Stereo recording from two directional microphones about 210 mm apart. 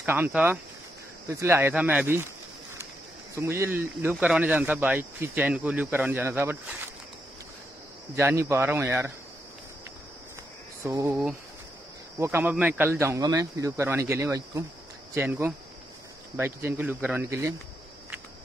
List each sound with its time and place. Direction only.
0.0 s speech: 10° right (ahead or behind)
3.3 s speech: 10° right (ahead or behind)
8.2 s speech: 10° right (ahead or behind)
10.8 s speech: 10° right (ahead or behind)